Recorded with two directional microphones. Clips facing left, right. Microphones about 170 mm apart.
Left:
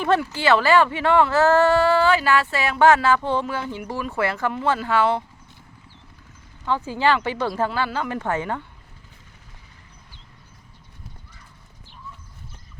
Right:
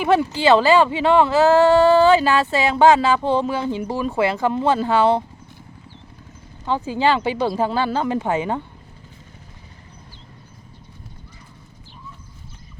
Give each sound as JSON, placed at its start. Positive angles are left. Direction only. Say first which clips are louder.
{"t": 0.2, "sound": "speech", "louder": "right 4 dB", "side_deg": -20}
{"t": 6.7, "sound": "speech", "louder": "right 2 dB", "side_deg": -15}
{"t": 7.7, "sound": "speech", "louder": "right 5 dB", "side_deg": -25}
{"t": 8.2, "sound": "speech", "louder": "right 4 dB", "side_deg": -15}